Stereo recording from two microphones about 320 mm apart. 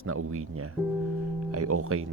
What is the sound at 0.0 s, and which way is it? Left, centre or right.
Speech, right.